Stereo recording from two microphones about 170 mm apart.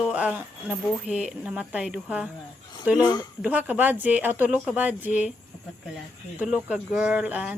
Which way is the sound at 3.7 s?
10° right (ahead or behind).